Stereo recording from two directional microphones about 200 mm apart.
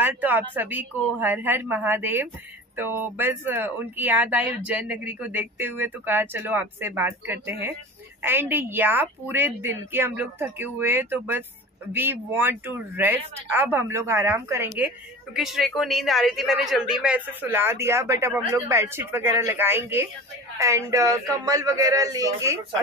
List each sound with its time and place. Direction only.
0.0 s speech: 10° right (ahead or behind)
15.3 s speech: centre (ahead or behind)